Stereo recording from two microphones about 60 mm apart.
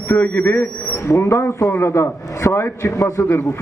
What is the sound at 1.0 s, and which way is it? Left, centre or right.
Speech, left.